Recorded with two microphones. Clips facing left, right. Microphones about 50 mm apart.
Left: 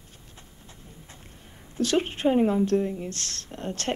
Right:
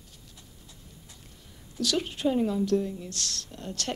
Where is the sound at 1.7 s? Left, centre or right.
Left.